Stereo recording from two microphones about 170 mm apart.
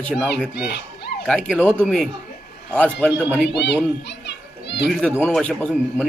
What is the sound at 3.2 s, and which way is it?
Speech, 10° right (ahead or behind).